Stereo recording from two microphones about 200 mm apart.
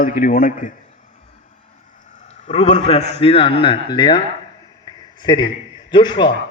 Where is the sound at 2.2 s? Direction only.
35° left (ahead or behind).